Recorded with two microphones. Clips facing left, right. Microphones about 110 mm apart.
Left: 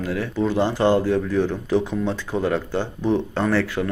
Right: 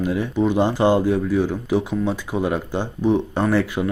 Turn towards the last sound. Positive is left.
turn(degrees=-15)  # may be behind; listen again after turning